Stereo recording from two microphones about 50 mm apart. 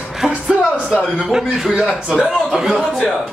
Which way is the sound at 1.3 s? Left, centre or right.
Centre.